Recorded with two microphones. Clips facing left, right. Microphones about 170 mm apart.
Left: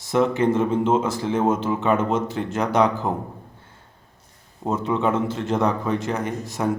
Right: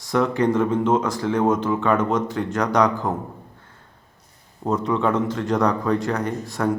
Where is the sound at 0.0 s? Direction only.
25° left (ahead or behind).